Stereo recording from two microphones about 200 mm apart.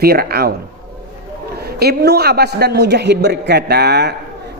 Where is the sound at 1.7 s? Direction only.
55° right (ahead or behind).